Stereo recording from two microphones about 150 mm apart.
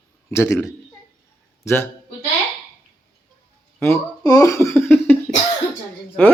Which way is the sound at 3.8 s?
20° left (ahead or behind).